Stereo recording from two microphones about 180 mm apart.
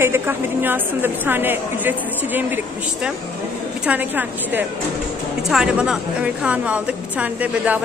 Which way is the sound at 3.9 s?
10° right (ahead or behind).